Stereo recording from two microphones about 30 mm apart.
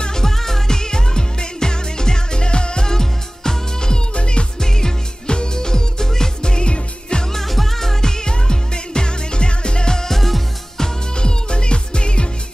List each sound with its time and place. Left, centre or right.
0.1 s music: centre; by 2.9 s left
2.9 s music: centre
4.1 s music: left
4.6 s music: left
6.5 s music: left
7.3 s music: centre; by 9.9 s left
9.9 s music: centre
11.1 s music: left